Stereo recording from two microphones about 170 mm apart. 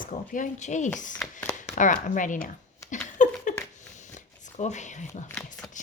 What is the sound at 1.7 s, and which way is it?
Speech, 50° left (ahead or behind).